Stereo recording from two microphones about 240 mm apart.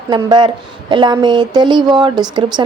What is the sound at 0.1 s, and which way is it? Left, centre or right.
A woman's voice, centre.